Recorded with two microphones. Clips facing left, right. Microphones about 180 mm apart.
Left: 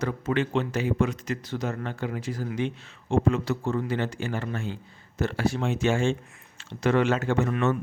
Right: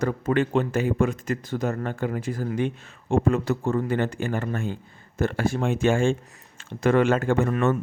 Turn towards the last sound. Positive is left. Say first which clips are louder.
# right 3 dB
turn(degrees=-50)  # may be behind; listen again after turning